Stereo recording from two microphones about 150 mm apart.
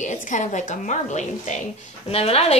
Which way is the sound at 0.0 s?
55° left (ahead or behind).